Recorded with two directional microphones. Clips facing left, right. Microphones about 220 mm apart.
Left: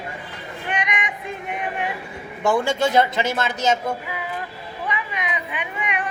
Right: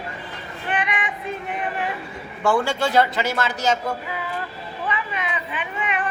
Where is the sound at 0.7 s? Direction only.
15° left (ahead or behind).